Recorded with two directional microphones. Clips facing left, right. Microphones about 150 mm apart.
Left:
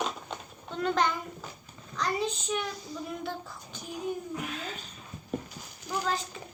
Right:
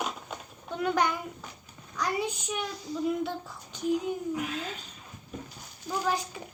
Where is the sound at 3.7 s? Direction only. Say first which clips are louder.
Right 15 dB; 20° right (ahead or behind).